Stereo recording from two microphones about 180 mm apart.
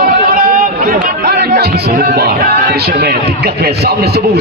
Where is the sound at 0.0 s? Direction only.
50° right (ahead or behind).